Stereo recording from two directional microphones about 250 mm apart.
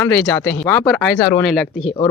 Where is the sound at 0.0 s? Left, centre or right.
Centre.